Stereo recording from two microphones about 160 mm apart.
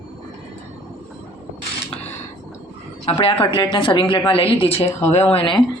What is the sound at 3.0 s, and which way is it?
A woman's voice, 30° left (ahead or behind).